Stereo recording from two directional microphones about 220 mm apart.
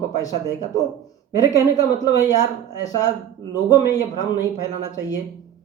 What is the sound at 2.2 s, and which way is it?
Speech, 15° left (ahead or behind).